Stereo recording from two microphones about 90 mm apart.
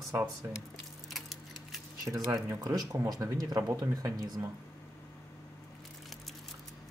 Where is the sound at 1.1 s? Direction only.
Centre (ahead or behind).